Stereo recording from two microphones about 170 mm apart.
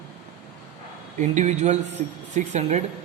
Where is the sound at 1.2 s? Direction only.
45° right (ahead or behind).